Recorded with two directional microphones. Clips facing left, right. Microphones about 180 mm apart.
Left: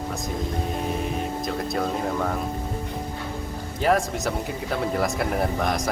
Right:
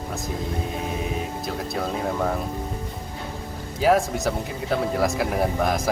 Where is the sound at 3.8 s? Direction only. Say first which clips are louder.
Right 2 dB; centre (ahead or behind).